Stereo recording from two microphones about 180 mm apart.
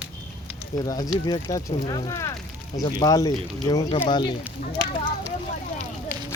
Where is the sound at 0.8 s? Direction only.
20° left (ahead or behind).